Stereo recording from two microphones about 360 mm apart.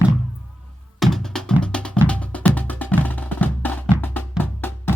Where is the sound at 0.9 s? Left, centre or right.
Centre.